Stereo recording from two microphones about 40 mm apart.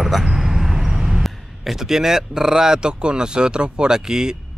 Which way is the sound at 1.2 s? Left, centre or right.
Centre.